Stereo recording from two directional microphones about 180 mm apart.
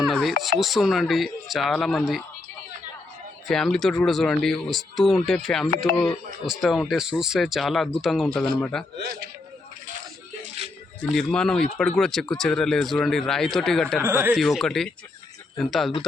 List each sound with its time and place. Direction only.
0.0 s speech: centre (ahead or behind)
3.4 s speech: centre (ahead or behind)
9.0 s a man's voice: 60° right (ahead or behind)
11.1 s speech: 5° left (ahead or behind)
14.0 s speech: 10° right (ahead or behind)
14.3 s speech: centre (ahead or behind)